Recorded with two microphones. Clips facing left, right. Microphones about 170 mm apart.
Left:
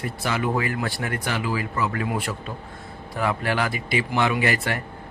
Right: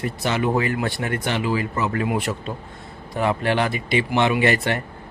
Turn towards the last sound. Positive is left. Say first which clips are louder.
# right 4 dB
turn(degrees=-25)  # may be behind; listen again after turning